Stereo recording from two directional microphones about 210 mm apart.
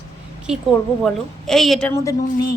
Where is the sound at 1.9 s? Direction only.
15° left (ahead or behind).